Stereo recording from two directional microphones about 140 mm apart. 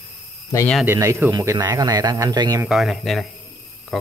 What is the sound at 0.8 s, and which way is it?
Speech, 20° right (ahead or behind).